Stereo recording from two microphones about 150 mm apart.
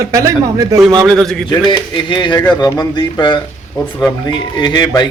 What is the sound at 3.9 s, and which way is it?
Speech, 20° left (ahead or behind).